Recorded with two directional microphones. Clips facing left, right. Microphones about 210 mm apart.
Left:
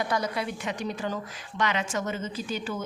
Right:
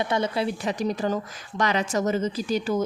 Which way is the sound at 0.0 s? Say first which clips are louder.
Right 4 dB; 25° right (ahead or behind).